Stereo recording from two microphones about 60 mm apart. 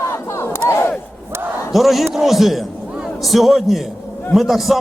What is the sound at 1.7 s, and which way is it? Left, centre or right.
A man's voice, centre.